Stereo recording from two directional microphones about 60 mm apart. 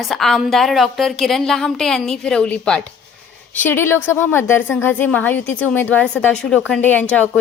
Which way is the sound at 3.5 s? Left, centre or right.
Left.